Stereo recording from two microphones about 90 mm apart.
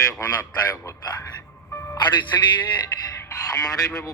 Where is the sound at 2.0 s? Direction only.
55° left (ahead or behind).